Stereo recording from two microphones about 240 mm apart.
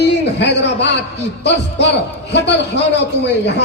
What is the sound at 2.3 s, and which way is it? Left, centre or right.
A man's voice, left.